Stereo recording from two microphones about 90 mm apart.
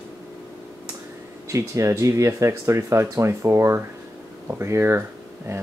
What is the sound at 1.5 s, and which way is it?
Speech, 35° right (ahead or behind).